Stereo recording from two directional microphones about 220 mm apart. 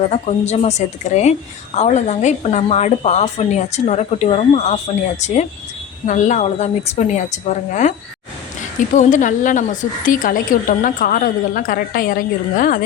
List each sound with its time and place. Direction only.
0.1 s a woman's voice: 30° left (ahead or behind)
9.0 s a woman's voice: 35° left (ahead or behind)